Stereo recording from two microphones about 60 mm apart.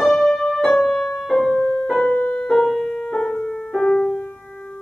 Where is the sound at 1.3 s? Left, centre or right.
Left.